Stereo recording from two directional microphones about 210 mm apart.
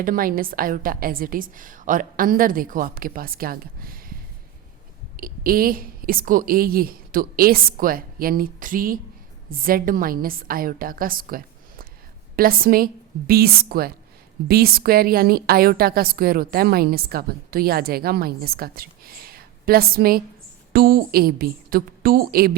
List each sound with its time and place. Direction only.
0.0 s a woman's voice: 40° right (ahead or behind)